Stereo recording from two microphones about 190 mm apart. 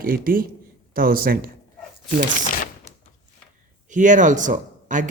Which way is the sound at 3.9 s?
40° right (ahead or behind).